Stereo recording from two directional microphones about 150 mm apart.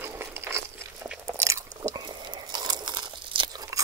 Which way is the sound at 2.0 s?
30° right (ahead or behind).